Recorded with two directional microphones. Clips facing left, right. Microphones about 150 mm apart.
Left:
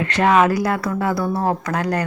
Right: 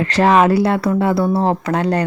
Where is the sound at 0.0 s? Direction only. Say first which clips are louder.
Right 3 dB; 35° right (ahead or behind).